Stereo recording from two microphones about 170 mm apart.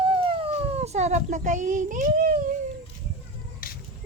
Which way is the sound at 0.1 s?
35° right (ahead or behind).